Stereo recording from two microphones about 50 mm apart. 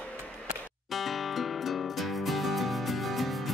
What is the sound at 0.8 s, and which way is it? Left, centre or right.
Music, centre.